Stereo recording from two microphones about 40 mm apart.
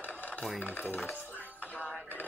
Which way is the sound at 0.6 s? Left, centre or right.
Left.